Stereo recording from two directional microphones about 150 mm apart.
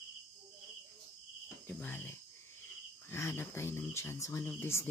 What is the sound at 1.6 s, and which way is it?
Speech, 10° left (ahead or behind).